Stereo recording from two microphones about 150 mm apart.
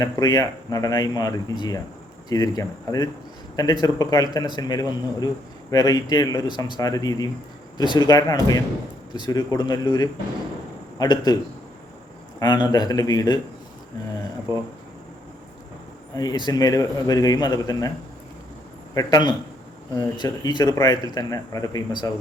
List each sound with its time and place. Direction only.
0.0 s a man's voice: 25° left (ahead or behind)
12.4 s speech: 30° left (ahead or behind)
16.1 s speech: 25° left (ahead or behind)
18.9 s speech: 25° left (ahead or behind)